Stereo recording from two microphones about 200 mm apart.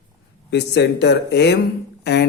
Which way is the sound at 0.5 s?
60° left (ahead or behind).